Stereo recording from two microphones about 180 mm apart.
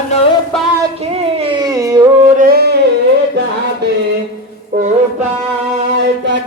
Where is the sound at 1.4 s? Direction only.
25° right (ahead or behind).